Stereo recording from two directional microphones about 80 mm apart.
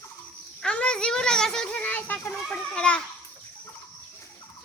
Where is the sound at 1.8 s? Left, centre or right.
Centre.